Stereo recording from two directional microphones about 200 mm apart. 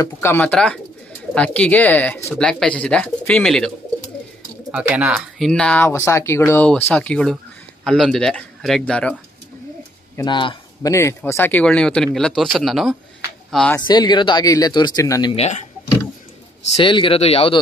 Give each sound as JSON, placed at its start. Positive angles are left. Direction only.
{"t": 0.0, "sound": "speech", "side_deg": 10}
{"t": 10.1, "sound": "speech", "side_deg": 25}
{"t": 13.7, "sound": "speech", "side_deg": 20}
{"t": 15.3, "sound": "speech", "side_deg": 35}
{"t": 16.7, "sound": "speech", "side_deg": 25}